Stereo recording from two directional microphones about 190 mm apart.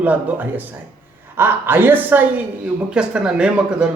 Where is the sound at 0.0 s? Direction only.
10° right (ahead or behind).